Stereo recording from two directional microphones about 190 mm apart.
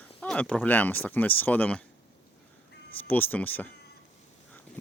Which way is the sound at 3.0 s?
10° left (ahead or behind).